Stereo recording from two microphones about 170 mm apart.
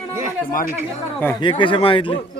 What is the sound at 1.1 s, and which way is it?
Speech, 15° left (ahead or behind).